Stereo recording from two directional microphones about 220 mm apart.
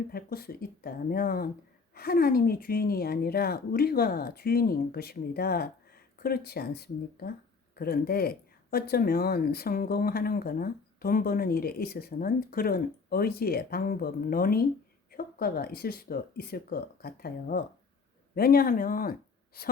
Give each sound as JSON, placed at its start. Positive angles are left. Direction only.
{"t": 0.1, "sound": "speech", "side_deg": 40}